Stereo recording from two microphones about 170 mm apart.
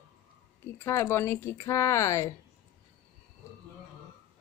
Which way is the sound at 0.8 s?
15° left (ahead or behind).